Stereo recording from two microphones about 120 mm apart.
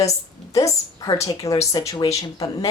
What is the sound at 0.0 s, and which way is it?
A woman's voice, 25° left (ahead or behind).